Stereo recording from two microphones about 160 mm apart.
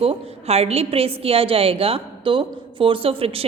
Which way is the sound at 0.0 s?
40° right (ahead or behind).